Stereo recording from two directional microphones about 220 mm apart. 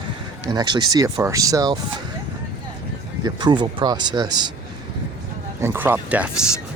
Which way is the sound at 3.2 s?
20° right (ahead or behind).